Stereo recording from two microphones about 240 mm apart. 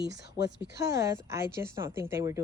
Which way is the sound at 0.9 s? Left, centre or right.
Centre.